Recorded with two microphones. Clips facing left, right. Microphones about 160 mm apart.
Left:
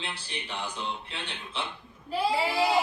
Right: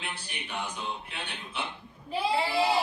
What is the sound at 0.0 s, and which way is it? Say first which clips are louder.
A man's voice: left 2 dB; 30° left (ahead or behind).